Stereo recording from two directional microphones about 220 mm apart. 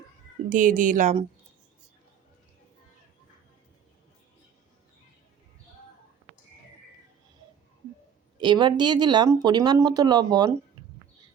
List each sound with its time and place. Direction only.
0.5 s speech: 35° right (ahead or behind)
8.4 s speech: 20° right (ahead or behind)